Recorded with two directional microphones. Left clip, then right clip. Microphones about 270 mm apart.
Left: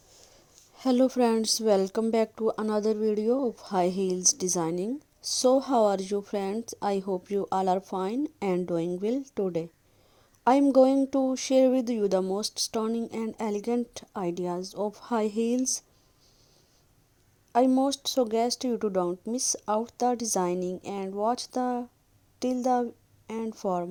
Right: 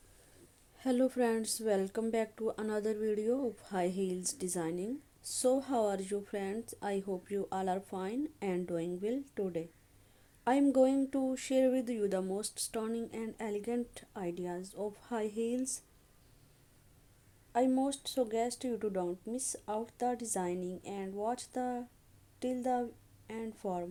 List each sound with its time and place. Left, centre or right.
0.8 s speech: left
17.5 s a woman's voice: left